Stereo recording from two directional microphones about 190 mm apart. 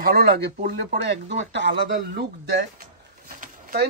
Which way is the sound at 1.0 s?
65° right (ahead or behind).